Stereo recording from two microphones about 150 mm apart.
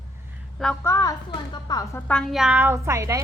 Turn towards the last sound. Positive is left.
turn(degrees=-20)  # may be behind; listen again after turning